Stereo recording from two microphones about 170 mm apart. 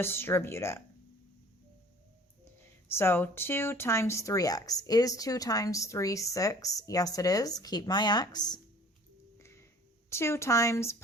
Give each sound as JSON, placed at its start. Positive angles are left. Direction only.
{"t": 0.0, "sound": "speech", "side_deg": 15}
{"t": 2.9, "sound": "speech", "side_deg": 15}
{"t": 9.4, "sound": "music", "side_deg": 15}
{"t": 10.1, "sound": "speech", "side_deg": 15}